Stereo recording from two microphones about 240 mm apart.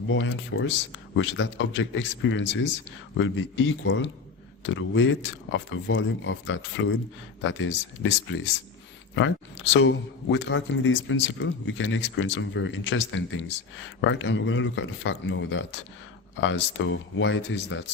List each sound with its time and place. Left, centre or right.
0.1 s speech: left
9.1 s speech: left